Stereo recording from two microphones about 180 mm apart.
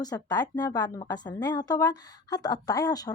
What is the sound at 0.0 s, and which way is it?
A woman's voice, 20° left (ahead or behind).